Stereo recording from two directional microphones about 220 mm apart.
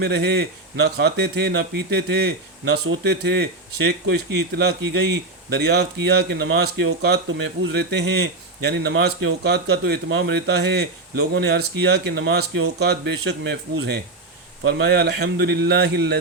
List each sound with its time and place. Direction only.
0.0 s speech: 50° right (ahead or behind)
14.7 s speech: 50° right (ahead or behind)